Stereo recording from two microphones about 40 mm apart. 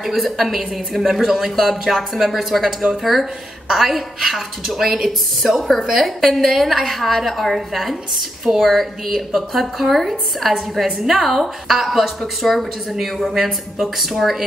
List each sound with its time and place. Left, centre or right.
0.0 s a woman's voice: centre
13.3 s speech: centre